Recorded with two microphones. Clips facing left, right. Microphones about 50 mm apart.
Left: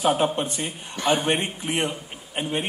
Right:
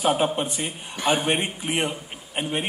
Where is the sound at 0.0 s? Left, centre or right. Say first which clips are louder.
Even; centre.